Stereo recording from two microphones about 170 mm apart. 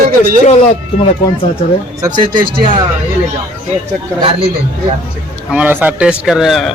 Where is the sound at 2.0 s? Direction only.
25° right (ahead or behind).